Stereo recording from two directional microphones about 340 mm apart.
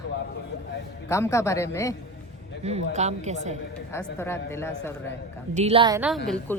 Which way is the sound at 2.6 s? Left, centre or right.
Centre.